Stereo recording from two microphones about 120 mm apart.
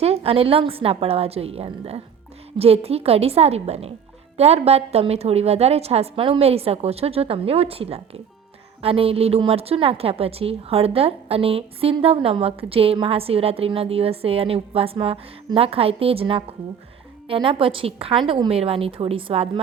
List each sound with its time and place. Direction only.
0.0 s a woman's voice: 55° right (ahead or behind)